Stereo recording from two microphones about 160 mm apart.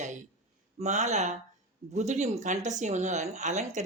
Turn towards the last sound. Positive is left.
turn(degrees=-45)  # may be behind; listen again after turning